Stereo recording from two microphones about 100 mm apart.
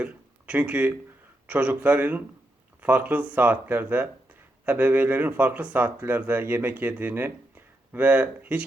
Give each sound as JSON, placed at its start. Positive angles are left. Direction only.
{"t": 0.0, "sound": "speech", "side_deg": -10}